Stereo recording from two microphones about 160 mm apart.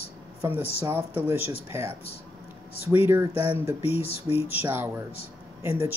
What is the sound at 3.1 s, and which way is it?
Speech, 15° right (ahead or behind).